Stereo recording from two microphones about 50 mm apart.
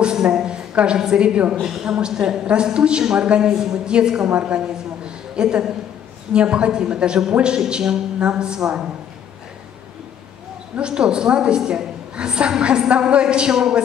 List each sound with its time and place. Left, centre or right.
0.0 s a sound: centre
0.7 s a man's voice: centre
10.8 s a woman's voice: centre